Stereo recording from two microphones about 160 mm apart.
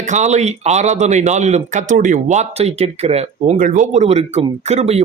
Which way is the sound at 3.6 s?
55° right (ahead or behind).